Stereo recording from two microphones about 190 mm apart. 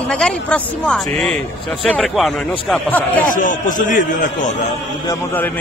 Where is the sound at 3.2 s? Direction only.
45° left (ahead or behind).